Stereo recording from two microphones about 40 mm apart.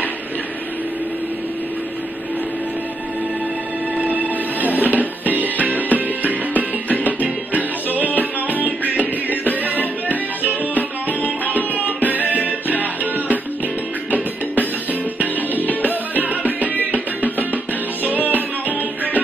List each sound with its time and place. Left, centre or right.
4.0 s music: right
12.0 s music: right
15.5 s music: left
16.2 s music: right